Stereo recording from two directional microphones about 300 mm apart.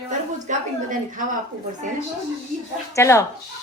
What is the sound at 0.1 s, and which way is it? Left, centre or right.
A woman's voice, right.